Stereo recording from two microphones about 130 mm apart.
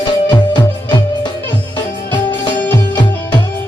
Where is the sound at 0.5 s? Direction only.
35° left (ahead or behind).